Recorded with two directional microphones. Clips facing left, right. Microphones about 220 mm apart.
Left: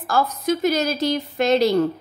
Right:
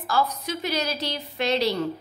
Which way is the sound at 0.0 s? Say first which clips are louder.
Left 4 dB; 45° left (ahead or behind).